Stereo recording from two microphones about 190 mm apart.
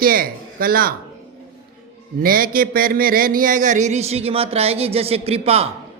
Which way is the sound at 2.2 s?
50° right (ahead or behind).